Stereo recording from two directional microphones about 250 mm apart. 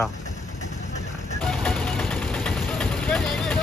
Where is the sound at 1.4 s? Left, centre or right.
Centre.